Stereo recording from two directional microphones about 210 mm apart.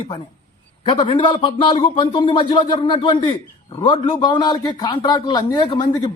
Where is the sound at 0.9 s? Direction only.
25° left (ahead or behind).